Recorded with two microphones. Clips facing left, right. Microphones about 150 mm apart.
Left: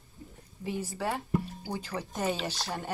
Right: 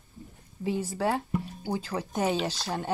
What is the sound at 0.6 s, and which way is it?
Speech, 15° right (ahead or behind).